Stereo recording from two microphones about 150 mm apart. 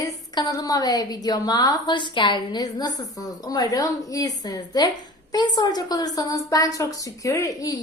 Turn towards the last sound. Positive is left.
turn(degrees=20)  # may be behind; listen again after turning